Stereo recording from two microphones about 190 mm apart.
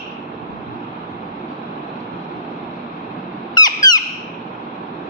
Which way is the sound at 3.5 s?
20° left (ahead or behind).